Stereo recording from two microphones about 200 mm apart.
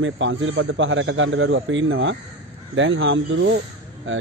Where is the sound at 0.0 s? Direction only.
70° right (ahead or behind).